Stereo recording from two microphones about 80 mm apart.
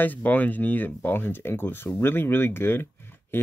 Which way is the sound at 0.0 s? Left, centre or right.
Left.